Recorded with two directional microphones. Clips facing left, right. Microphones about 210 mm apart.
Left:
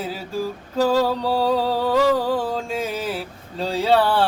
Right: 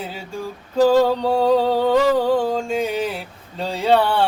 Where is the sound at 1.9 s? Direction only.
5° left (ahead or behind).